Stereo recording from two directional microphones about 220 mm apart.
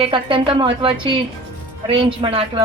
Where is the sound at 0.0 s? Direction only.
20° right (ahead or behind).